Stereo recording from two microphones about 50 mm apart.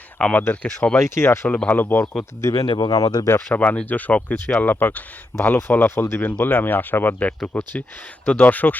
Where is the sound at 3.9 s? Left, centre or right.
Left.